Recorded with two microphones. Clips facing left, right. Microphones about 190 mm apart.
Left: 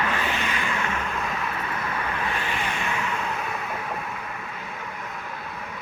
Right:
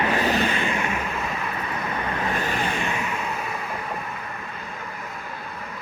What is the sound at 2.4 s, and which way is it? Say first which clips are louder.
Vehicle: right 3 dB; 40° right (ahead or behind).